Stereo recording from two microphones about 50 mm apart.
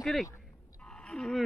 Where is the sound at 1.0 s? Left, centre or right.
Centre.